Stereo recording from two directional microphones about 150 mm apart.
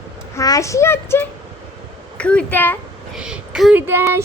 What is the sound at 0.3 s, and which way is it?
Speech, 20° left (ahead or behind).